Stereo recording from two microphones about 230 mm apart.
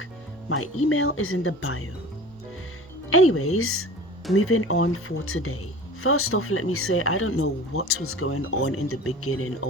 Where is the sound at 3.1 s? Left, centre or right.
Left.